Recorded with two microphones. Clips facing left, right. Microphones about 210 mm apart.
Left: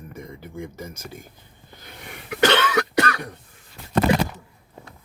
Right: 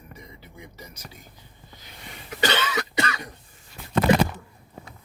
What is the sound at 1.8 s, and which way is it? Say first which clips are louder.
Cough: left 4 dB; 60° left (ahead or behind).